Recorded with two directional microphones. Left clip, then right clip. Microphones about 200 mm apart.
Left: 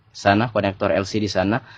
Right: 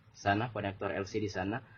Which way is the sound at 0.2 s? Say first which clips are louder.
Left 14 dB; 45° left (ahead or behind).